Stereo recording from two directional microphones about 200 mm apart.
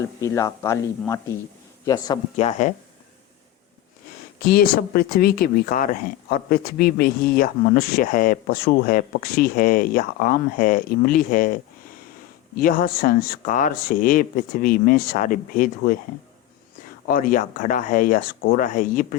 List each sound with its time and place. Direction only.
0.2 s a man's voice: 15° left (ahead or behind)
2.3 s speech: 35° left (ahead or behind)
4.4 s speech: 45° left (ahead or behind)
17.1 s speech: 45° left (ahead or behind)